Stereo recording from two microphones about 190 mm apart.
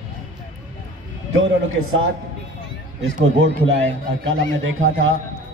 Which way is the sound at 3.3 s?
80° right.